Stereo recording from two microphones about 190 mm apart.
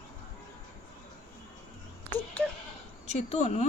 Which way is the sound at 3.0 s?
35° left (ahead or behind).